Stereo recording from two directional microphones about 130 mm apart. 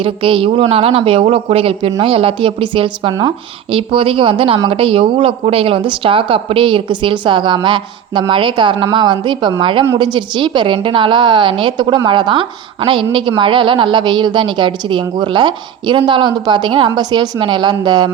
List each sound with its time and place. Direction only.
0.0 s a woman's voice: 45° right (ahead or behind)